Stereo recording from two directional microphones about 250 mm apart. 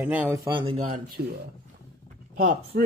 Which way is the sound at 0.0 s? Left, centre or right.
Centre.